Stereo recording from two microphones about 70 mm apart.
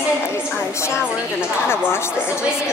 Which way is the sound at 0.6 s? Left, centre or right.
Left.